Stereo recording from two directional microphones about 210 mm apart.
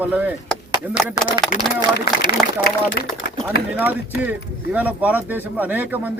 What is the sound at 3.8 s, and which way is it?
Speech, 5° right (ahead or behind).